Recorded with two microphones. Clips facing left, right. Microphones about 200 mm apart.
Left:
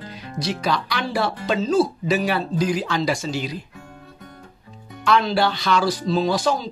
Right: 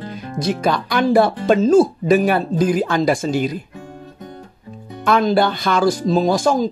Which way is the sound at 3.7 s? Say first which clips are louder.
Right 7 dB; 35° right (ahead or behind).